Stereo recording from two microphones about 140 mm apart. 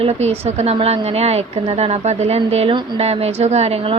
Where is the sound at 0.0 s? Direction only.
50° right (ahead or behind).